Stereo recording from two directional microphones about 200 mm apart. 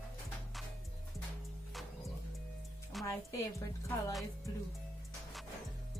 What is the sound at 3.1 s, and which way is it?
Speech, 15° left (ahead or behind).